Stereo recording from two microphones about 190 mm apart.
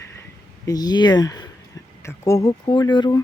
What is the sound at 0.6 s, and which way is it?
Speech, 20° left (ahead or behind).